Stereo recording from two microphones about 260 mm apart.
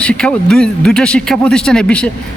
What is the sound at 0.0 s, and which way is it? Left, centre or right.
A man's voice, centre.